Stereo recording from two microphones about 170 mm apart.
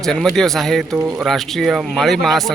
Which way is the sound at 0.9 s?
15° right (ahead or behind).